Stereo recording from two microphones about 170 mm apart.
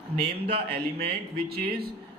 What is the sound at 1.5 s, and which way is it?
Speech, 65° right (ahead or behind).